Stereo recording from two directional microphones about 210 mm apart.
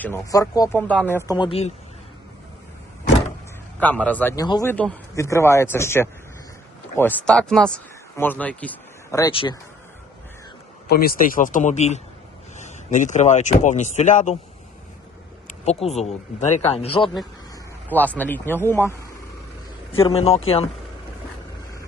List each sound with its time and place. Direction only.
0.0 s speech: 15° left (ahead or behind)
3.8 s speech: 5° left (ahead or behind)
4.4 s speech: 20° left (ahead or behind)
4.7 s speech: 10° left (ahead or behind)
9.3 s speech: 25° left (ahead or behind)
10.8 s speech: 45° left (ahead or behind)
15.6 s speech: 30° left (ahead or behind)
17.5 s speech: 10° left (ahead or behind)
20.1 s speech: 30° left (ahead or behind)